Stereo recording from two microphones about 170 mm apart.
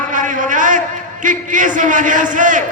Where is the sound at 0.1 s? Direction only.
50° right (ahead or behind).